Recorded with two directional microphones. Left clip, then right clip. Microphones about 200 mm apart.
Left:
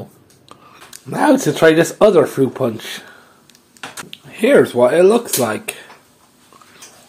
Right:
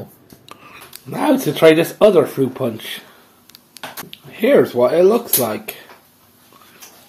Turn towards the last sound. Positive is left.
turn(degrees=20)  # may be behind; listen again after turning